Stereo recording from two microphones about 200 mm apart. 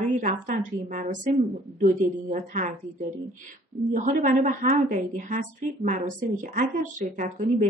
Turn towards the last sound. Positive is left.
turn(degrees=-40)  # may be behind; listen again after turning